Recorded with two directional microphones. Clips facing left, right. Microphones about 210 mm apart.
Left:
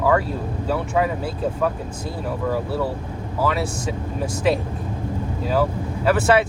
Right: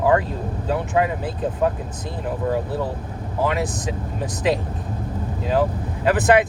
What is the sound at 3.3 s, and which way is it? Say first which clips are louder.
Speech: even; 20° right (ahead or behind).